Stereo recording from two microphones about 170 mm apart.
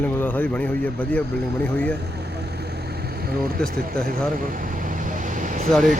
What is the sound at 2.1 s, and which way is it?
Vehicle, 75° right (ahead or behind).